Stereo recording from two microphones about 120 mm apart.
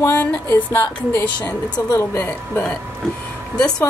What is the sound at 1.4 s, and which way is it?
A woman's voice, 25° left (ahead or behind).